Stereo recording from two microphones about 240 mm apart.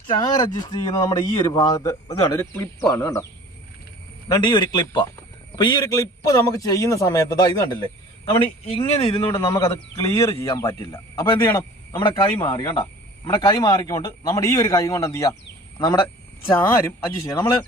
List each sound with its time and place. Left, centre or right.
0.2 s a man's voice: centre
4.3 s a man's voice: centre
9.3 s a man's voice: centre